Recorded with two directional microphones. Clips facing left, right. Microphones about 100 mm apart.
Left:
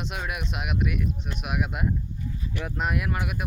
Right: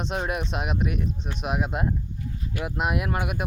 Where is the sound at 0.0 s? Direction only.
35° right (ahead or behind).